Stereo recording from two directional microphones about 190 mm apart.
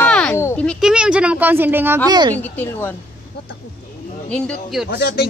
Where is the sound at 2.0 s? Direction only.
20° right (ahead or behind).